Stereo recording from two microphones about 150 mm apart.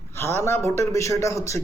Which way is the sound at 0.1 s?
15° left (ahead or behind).